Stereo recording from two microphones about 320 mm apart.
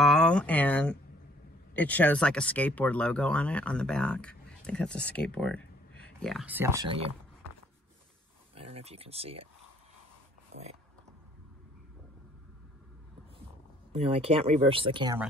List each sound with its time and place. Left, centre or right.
0.0 s speech: centre
8.5 s speech: centre
13.9 s speech: centre